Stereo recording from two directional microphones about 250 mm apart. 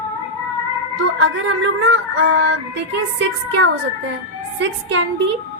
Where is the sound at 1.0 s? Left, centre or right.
Right.